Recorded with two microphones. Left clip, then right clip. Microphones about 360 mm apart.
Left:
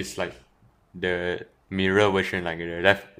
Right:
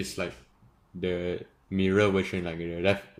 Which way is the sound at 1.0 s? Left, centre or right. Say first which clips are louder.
Left 4 dB; centre.